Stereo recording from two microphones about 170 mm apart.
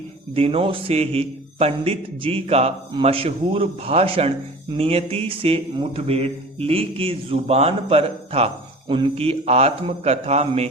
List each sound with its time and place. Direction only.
0.3 s a man's voice: 35° right (ahead or behind)